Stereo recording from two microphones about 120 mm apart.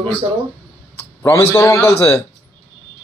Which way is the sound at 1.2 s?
25° left (ahead or behind).